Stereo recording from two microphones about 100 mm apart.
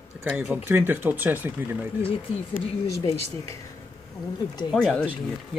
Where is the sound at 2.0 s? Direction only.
70° left (ahead or behind).